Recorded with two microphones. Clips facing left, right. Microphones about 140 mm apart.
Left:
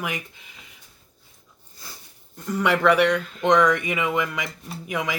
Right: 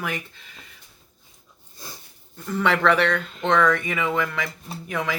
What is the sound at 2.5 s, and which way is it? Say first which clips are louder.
Speech: left 1 dB; 10° left (ahead or behind).